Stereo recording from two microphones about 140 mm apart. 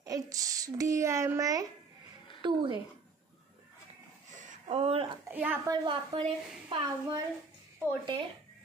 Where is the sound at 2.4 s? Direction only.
35° right (ahead or behind).